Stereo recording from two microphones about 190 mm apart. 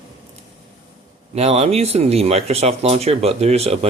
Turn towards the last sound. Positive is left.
turn(degrees=-35)  # may be behind; listen again after turning